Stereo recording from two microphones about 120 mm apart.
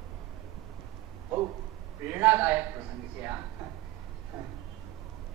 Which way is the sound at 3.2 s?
20° right (ahead or behind).